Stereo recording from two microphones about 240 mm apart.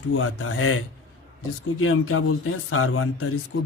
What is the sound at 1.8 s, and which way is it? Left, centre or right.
A man's voice, left.